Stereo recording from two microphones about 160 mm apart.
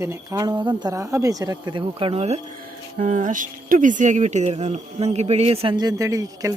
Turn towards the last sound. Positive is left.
turn(degrees=-20)  # may be behind; listen again after turning